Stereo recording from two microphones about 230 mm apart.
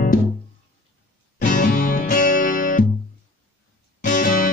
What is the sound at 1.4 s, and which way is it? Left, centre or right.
Music, left.